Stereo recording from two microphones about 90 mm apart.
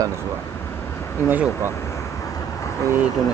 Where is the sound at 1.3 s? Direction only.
20° right (ahead or behind).